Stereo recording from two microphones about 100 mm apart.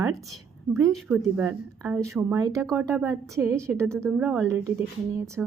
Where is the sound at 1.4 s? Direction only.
20° right (ahead or behind).